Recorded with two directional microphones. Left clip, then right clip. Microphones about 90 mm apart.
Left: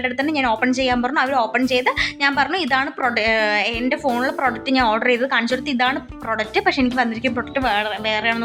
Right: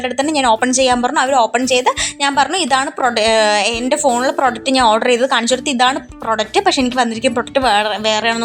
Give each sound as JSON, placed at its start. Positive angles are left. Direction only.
{"t": 0.0, "sound": "a woman's voice", "side_deg": -40}